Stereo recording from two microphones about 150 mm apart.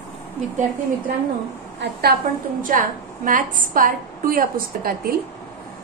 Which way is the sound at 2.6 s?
65° right (ahead or behind).